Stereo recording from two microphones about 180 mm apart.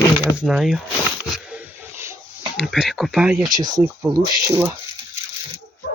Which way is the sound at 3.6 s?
20° right (ahead or behind).